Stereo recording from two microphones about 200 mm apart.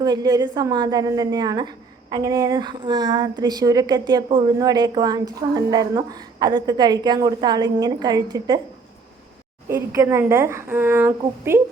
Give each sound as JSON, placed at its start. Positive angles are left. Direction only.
{"t": 0.0, "sound": "a woman's voice", "side_deg": -20}
{"t": 9.6, "sound": "a woman's voice", "side_deg": -15}